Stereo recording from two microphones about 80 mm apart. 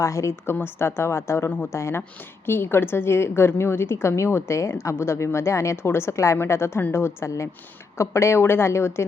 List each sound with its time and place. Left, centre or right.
0.0 s a woman's voice: left